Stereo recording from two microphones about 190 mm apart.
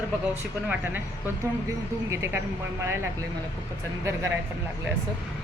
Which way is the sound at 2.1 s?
15° right (ahead or behind).